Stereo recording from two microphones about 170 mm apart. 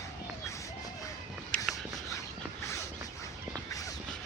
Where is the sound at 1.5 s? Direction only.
5° left (ahead or behind).